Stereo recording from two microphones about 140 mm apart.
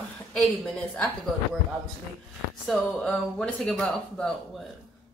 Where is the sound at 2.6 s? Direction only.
5° left (ahead or behind).